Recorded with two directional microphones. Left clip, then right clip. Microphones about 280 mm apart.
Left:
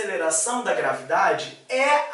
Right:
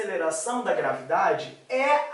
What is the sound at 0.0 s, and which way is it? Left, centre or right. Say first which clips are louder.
Speech: left 3 dB; centre.